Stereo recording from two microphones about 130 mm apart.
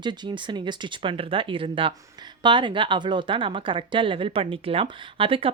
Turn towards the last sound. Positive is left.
turn(degrees=-45)  # may be behind; listen again after turning